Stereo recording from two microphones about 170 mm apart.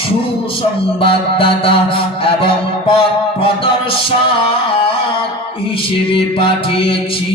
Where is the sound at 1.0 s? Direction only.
30° left (ahead or behind).